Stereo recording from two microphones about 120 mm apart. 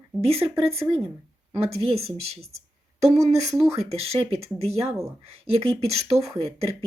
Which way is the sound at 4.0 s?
55° right (ahead or behind).